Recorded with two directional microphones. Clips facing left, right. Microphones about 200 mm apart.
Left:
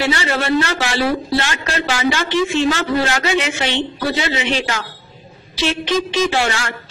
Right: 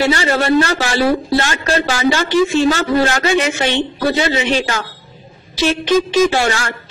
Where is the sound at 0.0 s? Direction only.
40° right (ahead or behind).